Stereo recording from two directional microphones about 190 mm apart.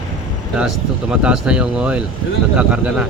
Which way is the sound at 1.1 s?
5° right (ahead or behind).